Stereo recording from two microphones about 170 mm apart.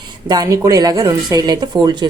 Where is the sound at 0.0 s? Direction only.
25° right (ahead or behind).